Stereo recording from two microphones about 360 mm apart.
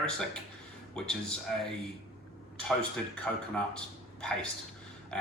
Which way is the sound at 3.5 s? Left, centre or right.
Centre.